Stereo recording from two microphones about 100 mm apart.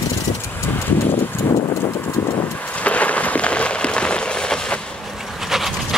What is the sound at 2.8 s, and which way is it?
Rain on surface, 15° left (ahead or behind).